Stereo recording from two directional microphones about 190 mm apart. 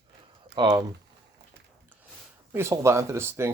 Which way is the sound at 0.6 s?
20° right (ahead or behind).